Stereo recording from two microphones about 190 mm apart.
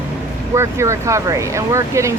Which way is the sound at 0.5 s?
15° right (ahead or behind).